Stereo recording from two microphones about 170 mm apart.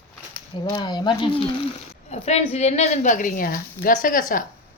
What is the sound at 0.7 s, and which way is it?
A woman's voice, 25° left (ahead or behind).